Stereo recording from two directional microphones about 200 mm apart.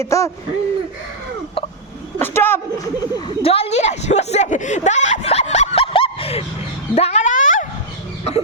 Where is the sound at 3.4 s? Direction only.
30° left (ahead or behind).